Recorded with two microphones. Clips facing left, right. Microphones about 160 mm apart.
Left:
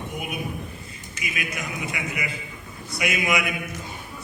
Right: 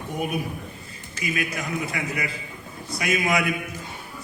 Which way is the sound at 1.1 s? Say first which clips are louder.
Right 5 dB; 35° right (ahead or behind).